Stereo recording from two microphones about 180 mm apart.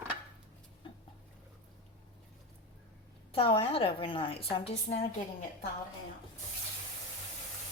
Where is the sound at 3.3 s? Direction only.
30° left (ahead or behind).